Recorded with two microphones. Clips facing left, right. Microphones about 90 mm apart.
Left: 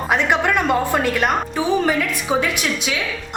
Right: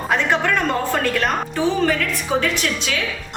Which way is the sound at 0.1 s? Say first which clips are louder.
Left 1 dB; 15° left (ahead or behind).